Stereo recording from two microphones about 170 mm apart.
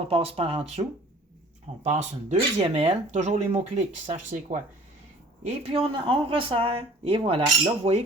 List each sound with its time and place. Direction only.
0.1 s speech: 35° right (ahead or behind)
3.1 s speech: 45° right (ahead or behind)